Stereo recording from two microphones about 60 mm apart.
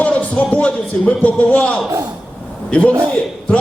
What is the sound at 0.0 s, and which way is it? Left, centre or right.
A man's voice, left.